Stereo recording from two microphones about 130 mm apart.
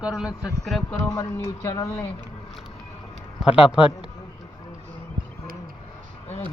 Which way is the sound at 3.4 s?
5° right (ahead or behind).